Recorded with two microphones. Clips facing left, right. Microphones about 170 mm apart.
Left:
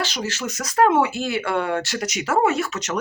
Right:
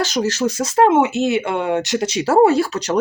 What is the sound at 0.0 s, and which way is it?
Speech, 40° right (ahead or behind).